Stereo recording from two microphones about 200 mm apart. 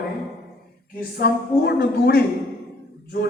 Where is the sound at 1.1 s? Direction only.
55° left (ahead or behind).